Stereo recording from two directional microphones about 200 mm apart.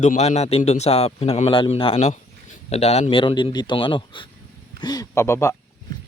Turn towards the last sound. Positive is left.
turn(degrees=15)  # may be behind; listen again after turning